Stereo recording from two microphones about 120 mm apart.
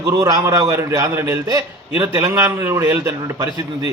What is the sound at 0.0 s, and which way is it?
A man's voice, 30° right (ahead or behind).